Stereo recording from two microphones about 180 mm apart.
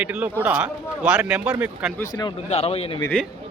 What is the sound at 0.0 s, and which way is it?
A man's voice, 5° right (ahead or behind).